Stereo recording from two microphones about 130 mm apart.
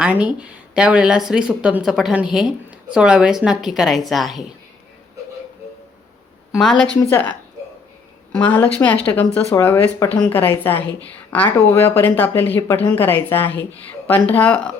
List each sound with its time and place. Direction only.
0.0 s speech: 10° right (ahead or behind)
6.5 s a woman's voice: centre (ahead or behind)
7.0 s a woman's voice: 20° left (ahead or behind)
8.4 s speech: 15° left (ahead or behind)